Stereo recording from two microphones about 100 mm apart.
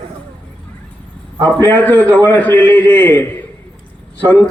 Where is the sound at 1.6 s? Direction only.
20° left (ahead or behind).